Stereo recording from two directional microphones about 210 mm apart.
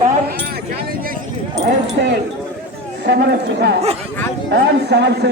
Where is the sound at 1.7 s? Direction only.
55° right (ahead or behind).